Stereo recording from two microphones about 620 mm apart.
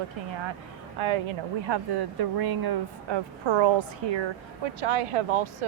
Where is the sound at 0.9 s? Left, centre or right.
Right.